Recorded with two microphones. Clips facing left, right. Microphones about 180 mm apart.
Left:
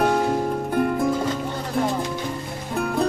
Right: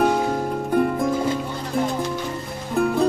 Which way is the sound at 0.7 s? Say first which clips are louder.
Right 3 dB; centre (ahead or behind).